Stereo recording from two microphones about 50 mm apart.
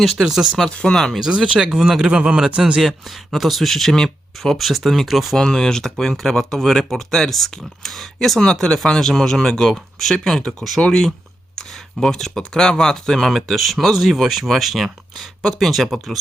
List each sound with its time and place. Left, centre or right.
0.0 s speech: centre
0.7 s speech: left
0.9 s speech: centre
1.2 s speech: centre
2.8 s speech: centre
4.5 s speech: centre
5.5 s speech: centre